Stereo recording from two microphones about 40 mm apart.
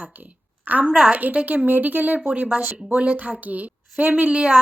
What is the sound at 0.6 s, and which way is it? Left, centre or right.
A woman's voice, right.